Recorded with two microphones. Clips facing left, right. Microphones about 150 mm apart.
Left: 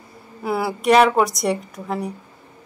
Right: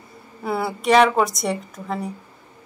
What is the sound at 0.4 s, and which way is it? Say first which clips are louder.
Speech: left 2 dB; centre (ahead or behind).